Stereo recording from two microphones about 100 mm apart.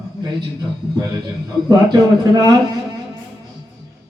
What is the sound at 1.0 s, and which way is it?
A man's voice, 40° right (ahead or behind).